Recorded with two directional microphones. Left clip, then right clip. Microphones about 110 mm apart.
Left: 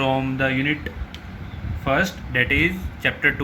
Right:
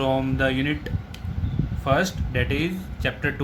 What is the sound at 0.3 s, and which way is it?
Speech, 65° right (ahead or behind).